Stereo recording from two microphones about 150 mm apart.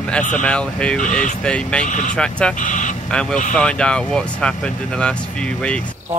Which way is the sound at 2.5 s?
60° left (ahead or behind).